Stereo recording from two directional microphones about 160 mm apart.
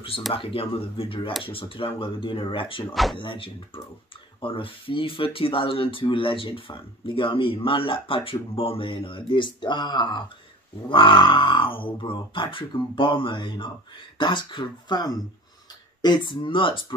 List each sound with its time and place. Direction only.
0.3 s speech: 35° left (ahead or behind)
2.9 s speech: centre (ahead or behind)
3.2 s speech: 30° left (ahead or behind)